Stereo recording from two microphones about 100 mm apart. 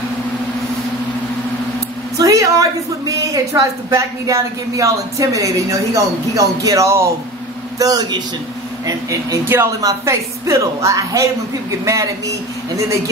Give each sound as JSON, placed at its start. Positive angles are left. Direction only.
{"t": 2.1, "sound": "a woman's voice", "side_deg": -35}
{"t": 7.8, "sound": "a woman's voice", "side_deg": -40}
{"t": 9.8, "sound": "a woman's voice", "side_deg": -35}